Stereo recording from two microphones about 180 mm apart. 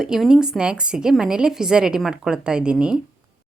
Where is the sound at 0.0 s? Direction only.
5° right (ahead or behind).